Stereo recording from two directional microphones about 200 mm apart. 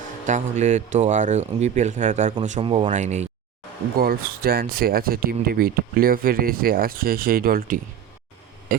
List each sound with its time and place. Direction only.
0.3 s speech: 35° right (ahead or behind)
3.9 s speech: 45° right (ahead or behind)